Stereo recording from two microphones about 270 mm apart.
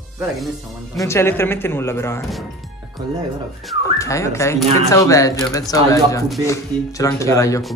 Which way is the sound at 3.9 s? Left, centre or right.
Centre.